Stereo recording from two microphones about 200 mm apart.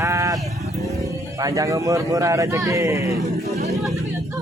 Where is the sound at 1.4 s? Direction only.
15° right (ahead or behind).